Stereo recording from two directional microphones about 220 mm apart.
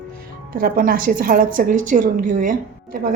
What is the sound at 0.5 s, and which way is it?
A woman's voice, 40° right (ahead or behind).